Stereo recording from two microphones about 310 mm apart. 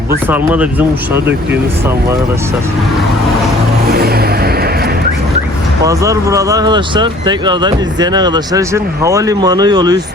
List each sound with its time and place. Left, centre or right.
0.3 s speech: centre
3.9 s vehicle: right
5.8 s speech: centre